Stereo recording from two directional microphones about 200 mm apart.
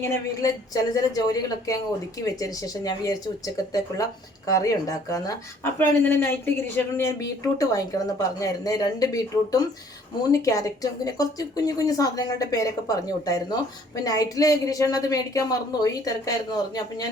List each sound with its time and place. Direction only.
0.0 s speech: 15° left (ahead or behind)